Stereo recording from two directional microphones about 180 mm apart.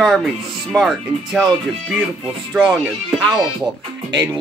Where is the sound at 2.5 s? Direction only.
Centre (ahead or behind).